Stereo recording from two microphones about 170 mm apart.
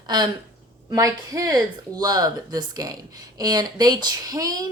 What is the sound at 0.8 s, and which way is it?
Speech, 20° right (ahead or behind).